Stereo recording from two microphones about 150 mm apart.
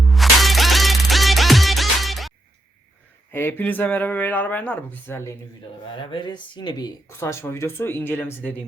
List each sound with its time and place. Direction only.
0.0 s music: centre (ahead or behind)
3.3 s speech: 15° left (ahead or behind)
6.0 s speech: 35° left (ahead or behind); by 8.6 s 10° left (ahead or behind)